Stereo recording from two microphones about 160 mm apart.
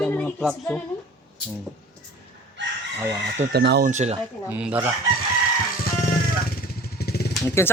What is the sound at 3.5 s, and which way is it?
Speech, 85° right.